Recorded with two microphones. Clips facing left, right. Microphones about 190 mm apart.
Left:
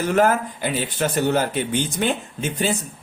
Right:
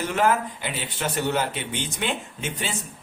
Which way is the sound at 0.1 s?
45° left (ahead or behind).